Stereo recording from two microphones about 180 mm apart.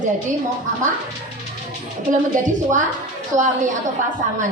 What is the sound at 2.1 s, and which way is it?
Speech, 45° right (ahead or behind).